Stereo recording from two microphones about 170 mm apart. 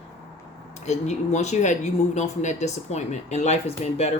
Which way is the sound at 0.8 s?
40° left (ahead or behind).